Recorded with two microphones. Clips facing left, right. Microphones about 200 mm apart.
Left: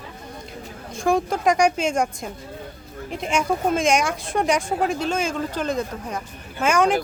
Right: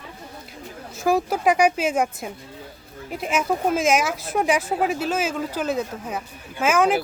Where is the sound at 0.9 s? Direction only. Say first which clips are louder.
Even; 5° right (ahead or behind).